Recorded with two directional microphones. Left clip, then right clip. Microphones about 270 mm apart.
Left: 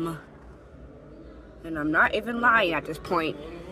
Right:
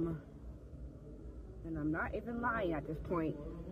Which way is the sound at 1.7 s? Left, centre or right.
Left.